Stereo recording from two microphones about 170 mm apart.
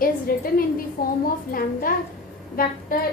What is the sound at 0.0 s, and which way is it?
A woman's voice, 60° left (ahead or behind).